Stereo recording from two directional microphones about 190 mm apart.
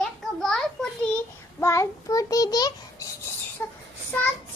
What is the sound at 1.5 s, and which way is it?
Child singing, 15° left (ahead or behind).